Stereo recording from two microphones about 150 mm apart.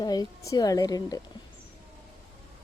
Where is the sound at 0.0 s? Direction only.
25° left (ahead or behind).